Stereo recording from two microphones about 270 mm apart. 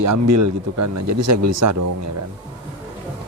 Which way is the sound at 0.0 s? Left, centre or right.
Right.